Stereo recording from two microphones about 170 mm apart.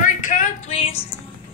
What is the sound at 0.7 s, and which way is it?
Music, 35° left (ahead or behind).